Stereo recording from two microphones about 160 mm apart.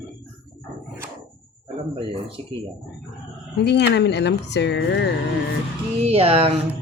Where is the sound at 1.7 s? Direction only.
35° right (ahead or behind).